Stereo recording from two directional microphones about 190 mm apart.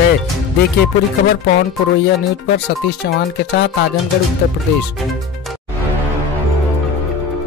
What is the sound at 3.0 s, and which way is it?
Speech, 65° left (ahead or behind).